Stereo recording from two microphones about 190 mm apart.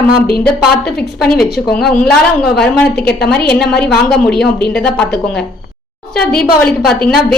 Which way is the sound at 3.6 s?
55° left (ahead or behind).